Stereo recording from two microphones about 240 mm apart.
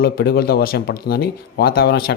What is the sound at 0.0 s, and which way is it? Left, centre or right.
A man's voice, left.